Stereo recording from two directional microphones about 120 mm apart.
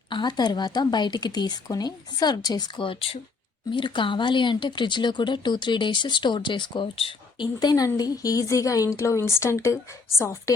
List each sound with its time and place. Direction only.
0.1 s speech: 40° left (ahead or behind)
7.6 s speech: 35° left (ahead or behind)